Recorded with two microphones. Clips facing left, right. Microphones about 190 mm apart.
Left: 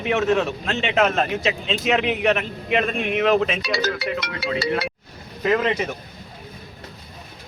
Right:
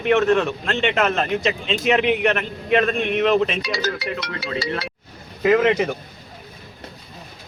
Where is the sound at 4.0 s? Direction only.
60° left (ahead or behind).